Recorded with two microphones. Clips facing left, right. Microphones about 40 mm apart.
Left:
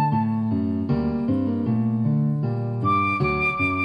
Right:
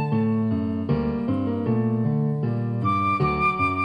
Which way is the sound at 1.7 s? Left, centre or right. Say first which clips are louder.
Even; centre.